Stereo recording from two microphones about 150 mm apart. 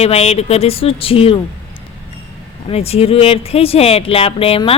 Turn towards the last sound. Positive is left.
turn(degrees=40)  # may be behind; listen again after turning